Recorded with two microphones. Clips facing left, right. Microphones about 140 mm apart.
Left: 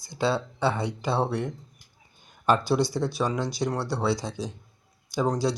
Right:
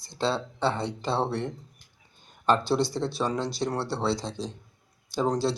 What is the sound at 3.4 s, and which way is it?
Speech, centre (ahead or behind).